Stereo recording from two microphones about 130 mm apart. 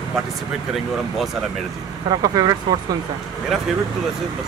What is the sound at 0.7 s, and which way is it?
Speech, centre (ahead or behind).